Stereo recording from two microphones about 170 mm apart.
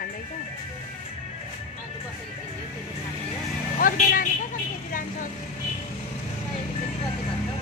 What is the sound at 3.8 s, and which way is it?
Speech, 55° left (ahead or behind).